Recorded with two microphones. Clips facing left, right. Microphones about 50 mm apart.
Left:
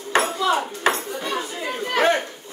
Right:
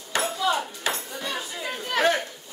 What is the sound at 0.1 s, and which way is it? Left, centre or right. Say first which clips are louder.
Ping: left 5 dB; left.